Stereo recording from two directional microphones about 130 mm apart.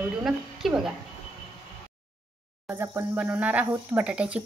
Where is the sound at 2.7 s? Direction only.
15° right (ahead or behind).